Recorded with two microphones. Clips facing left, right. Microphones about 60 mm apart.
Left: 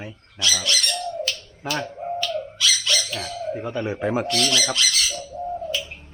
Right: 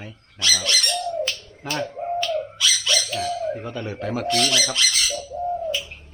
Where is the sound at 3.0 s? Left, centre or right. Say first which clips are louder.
Right 5 dB; centre.